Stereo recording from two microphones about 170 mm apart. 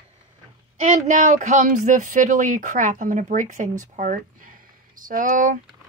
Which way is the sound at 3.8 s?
50° right (ahead or behind).